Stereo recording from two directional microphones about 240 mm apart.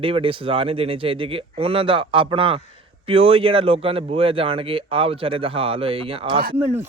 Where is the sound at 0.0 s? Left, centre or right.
Right.